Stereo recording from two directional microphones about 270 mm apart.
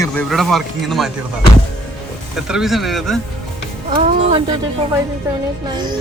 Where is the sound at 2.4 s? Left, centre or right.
Centre.